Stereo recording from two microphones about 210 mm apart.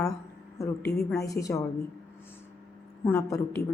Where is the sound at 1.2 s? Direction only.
15° left (ahead or behind).